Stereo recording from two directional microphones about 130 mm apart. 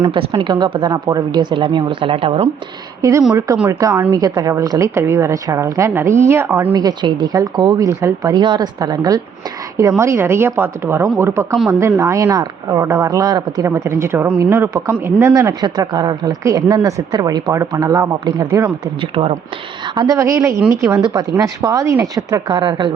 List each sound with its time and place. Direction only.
0.1 s speech: 40° right (ahead or behind)
3.0 s speech: 25° right (ahead or behind)
6.7 s speech: 35° right (ahead or behind)
20.0 s speech: 25° right (ahead or behind)